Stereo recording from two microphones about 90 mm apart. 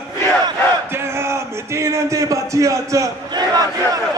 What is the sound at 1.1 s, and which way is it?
A man's voice, 30° right (ahead or behind).